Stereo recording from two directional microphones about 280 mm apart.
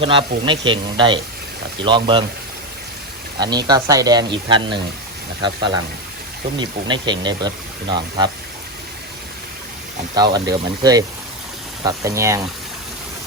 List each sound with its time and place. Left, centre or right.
0.0 s speech: centre
3.3 s speech: centre
10.3 s speech: centre